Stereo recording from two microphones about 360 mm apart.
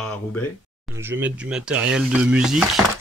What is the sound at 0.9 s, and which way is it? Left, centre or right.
Speech, centre.